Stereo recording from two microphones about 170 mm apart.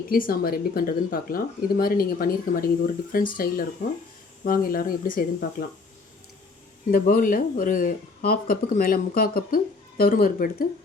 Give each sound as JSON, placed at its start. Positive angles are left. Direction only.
{"t": 0.1, "sound": "speech", "side_deg": 60}
{"t": 6.9, "sound": "speech", "side_deg": 55}